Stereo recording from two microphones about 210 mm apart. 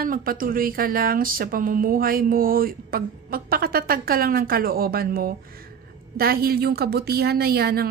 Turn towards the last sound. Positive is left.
turn(degrees=-45)  # may be behind; listen again after turning